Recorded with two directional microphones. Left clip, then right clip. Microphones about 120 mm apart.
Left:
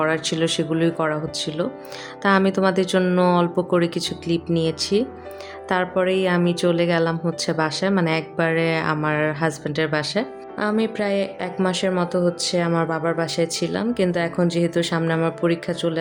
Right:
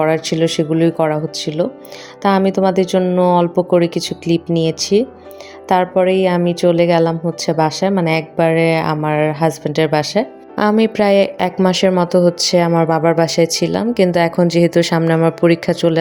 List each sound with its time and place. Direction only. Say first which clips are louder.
0.0 s speech: right 6 dB; 30° right (ahead or behind)
10.6 s a woman's voice: right 9 dB; 65° right (ahead or behind)
11.6 s speech: right 7 dB; 55° right (ahead or behind)